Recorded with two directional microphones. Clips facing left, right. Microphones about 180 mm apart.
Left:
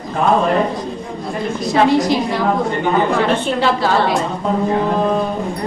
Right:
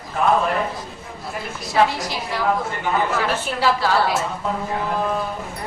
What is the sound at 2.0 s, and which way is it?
A woman's voice, 20° left (ahead or behind).